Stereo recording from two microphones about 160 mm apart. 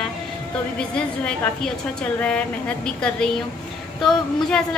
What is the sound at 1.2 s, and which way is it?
A woman's voice, 5° left (ahead or behind).